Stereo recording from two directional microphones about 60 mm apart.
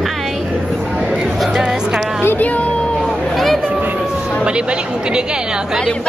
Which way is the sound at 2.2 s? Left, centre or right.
Left.